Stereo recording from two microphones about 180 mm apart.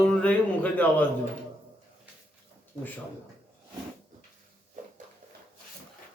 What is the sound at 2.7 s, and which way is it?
Speech, 25° right (ahead or behind).